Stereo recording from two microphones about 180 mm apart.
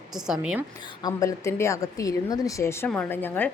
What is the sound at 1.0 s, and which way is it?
Speech, 15° left (ahead or behind).